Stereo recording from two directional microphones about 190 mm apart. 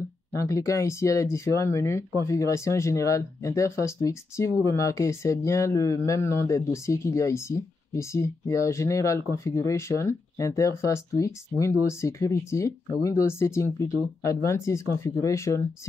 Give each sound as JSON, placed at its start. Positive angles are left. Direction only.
{"t": 0.3, "sound": "speech", "side_deg": 15}